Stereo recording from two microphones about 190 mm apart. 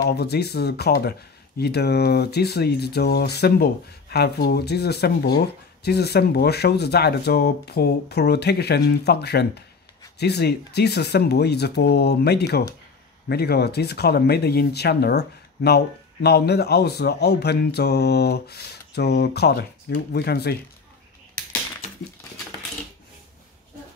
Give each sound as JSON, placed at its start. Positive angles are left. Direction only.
{"t": 0.1, "sound": "speech", "side_deg": 55}